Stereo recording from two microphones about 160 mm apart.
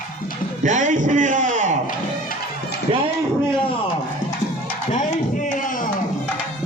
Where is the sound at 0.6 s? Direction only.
50° right (ahead or behind).